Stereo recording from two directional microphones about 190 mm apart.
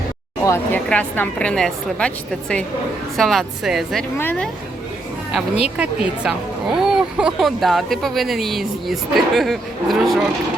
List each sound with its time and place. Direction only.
0.4 s a woman's voice: 15° left (ahead or behind)
4.2 s a woman's voice: 10° left (ahead or behind)
5.7 s speech: 5° right (ahead or behind)